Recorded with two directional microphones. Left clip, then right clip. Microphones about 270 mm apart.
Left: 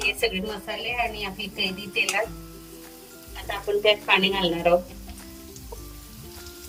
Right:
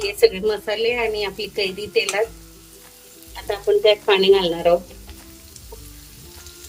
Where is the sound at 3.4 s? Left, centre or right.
Right.